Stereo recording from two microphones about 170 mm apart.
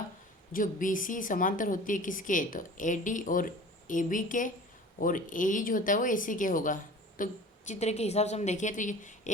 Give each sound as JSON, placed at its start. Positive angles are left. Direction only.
{"t": 0.5, "sound": "a woman's voice", "side_deg": 50}
{"t": 7.7, "sound": "a woman's voice", "side_deg": 40}